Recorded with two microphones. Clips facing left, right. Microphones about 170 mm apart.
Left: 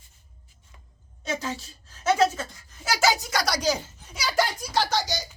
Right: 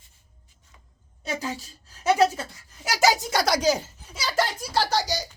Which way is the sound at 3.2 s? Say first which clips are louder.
Right 4 dB; 25° right (ahead or behind).